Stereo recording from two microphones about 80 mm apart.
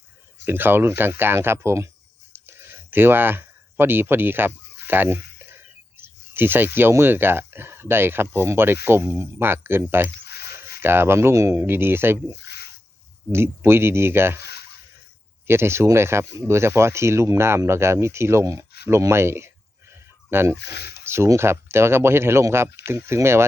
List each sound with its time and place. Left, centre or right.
0.4 s speech: right
2.3 s a sound: right
6.0 s speech: right
13.3 s speech: right
15.4 s speech: right